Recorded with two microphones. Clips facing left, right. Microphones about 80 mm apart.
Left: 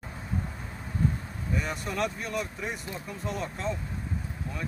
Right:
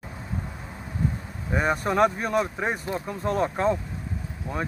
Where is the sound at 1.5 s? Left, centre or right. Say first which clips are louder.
Right 9 dB; right.